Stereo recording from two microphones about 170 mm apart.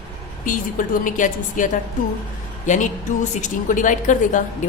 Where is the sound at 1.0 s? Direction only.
50° left (ahead or behind).